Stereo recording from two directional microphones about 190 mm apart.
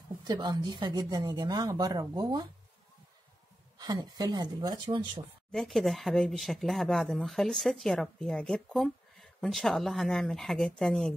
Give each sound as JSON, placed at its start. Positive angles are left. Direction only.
{"t": 0.2, "sound": "speech", "side_deg": -20}
{"t": 3.7, "sound": "speech", "side_deg": -20}
{"t": 5.5, "sound": "speech", "side_deg": 0}